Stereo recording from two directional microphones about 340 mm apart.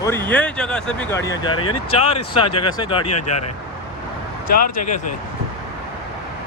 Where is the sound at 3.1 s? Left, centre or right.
Left.